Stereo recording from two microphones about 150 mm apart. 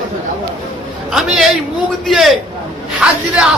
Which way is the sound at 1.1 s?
Centre (ahead or behind).